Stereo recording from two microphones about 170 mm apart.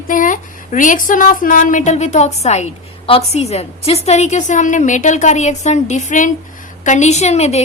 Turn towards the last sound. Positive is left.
turn(degrees=40)  # may be behind; listen again after turning